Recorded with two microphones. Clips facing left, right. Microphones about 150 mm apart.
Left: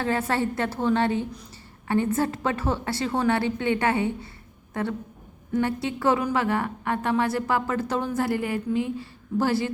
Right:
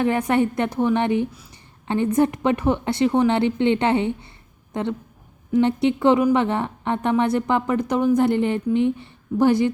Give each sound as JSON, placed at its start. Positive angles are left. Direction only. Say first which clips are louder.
{"t": 0.0, "sound": "a woman's voice", "louder": "right 5 dB", "side_deg": -15}